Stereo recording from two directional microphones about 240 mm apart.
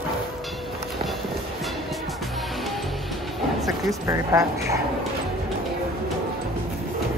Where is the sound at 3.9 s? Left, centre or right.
Centre.